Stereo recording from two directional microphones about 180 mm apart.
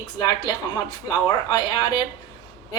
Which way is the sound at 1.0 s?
25° left (ahead or behind).